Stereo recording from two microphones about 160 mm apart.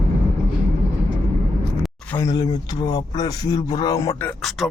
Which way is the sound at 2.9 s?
25° left (ahead or behind).